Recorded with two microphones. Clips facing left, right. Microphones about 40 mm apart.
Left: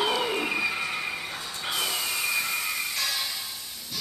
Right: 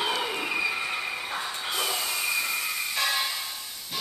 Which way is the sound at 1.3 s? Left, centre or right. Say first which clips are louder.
Right 4 dB; right.